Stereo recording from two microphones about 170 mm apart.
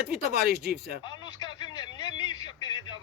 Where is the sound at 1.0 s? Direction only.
25° left (ahead or behind).